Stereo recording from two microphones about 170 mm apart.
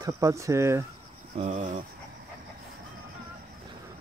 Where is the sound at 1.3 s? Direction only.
40° right (ahead or behind).